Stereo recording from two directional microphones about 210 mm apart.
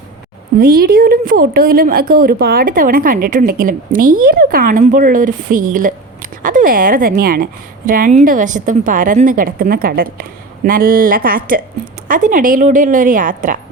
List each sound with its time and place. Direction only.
0.6 s a woman's voice: 45° right (ahead or behind)